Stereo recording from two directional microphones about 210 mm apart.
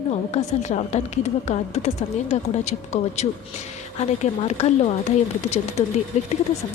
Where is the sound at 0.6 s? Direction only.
30° left (ahead or behind).